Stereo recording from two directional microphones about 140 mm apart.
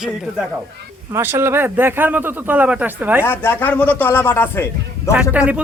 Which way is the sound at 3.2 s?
15° left (ahead or behind).